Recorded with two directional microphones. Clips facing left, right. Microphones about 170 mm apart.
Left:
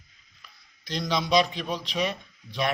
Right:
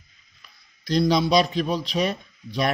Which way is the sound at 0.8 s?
40° right (ahead or behind).